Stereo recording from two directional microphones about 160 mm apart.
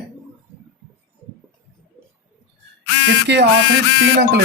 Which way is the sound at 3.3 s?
90° right.